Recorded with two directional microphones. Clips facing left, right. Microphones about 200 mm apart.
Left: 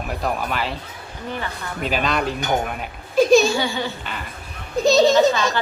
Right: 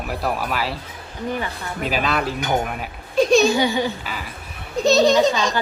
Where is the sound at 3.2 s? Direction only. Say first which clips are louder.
Left 2 dB; centre (ahead or behind).